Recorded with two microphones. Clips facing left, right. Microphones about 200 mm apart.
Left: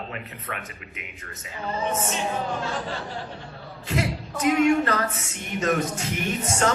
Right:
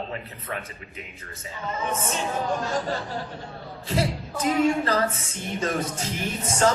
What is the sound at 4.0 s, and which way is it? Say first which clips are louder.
Speech: right 1 dB; 30° right (ahead or behind).